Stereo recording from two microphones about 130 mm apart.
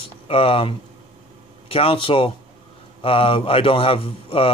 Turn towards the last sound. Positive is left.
turn(degrees=45)  # may be behind; listen again after turning